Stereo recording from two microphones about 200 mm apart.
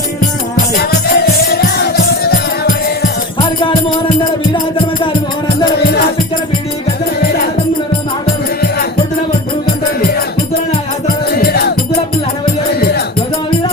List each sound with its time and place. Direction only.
0.8 s music: 50° left (ahead or behind)
11.3 s music: 50° left (ahead or behind)